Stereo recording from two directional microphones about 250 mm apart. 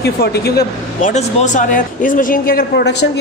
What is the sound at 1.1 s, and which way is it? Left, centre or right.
A woman's voice, left.